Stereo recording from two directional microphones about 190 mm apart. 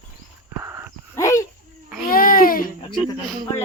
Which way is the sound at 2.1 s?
50° left (ahead or behind).